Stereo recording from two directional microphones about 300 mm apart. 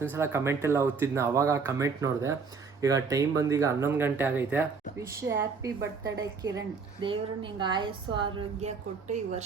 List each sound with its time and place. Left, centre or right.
0.0 s a woman's voice: centre